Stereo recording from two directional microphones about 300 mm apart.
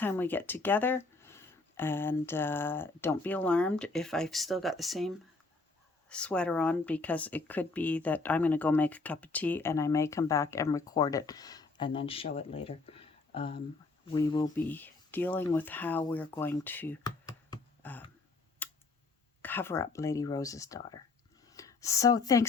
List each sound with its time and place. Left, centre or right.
0.0 s speech: centre
17.5 s a sound: centre
18.6 s tick: centre
19.4 s speech: centre